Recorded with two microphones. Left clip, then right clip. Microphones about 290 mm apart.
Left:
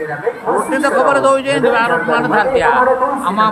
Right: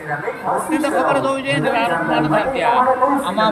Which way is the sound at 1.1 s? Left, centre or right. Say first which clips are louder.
Left 6 dB; centre.